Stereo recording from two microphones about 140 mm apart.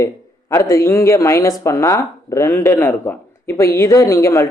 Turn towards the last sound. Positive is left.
turn(degrees=20)  # may be behind; listen again after turning